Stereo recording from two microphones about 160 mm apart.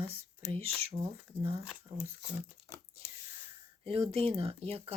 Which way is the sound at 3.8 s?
40° right (ahead or behind).